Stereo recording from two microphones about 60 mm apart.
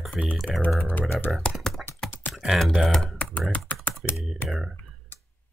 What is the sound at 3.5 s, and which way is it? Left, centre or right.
Typing, left.